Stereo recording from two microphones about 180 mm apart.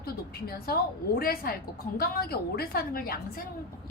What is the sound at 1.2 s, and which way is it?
A woman's voice, 55° left (ahead or behind).